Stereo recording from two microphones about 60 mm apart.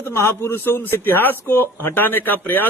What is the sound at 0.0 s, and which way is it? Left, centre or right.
A man's voice, left.